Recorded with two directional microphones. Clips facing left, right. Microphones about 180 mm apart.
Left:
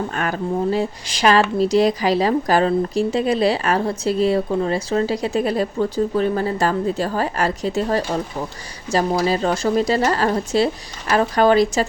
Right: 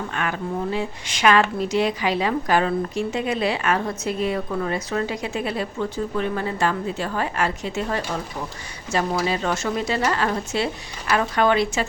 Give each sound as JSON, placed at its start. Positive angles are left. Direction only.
{"t": 0.1, "sound": "speech", "side_deg": 40}